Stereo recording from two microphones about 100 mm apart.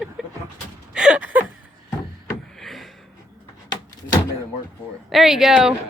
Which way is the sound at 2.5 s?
Centre (ahead or behind).